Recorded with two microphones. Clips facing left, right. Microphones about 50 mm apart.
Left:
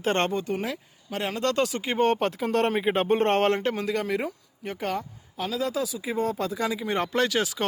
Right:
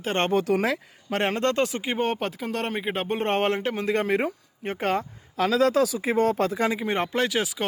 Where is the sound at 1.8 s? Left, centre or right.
Centre.